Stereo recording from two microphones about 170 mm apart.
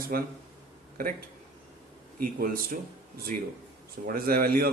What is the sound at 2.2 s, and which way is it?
Speech, 55° right (ahead or behind).